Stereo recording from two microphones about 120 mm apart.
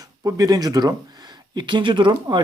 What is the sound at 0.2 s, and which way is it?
Speech, 30° right (ahead or behind).